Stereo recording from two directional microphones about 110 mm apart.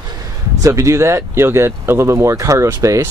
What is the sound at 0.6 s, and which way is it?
Speech, 25° right (ahead or behind).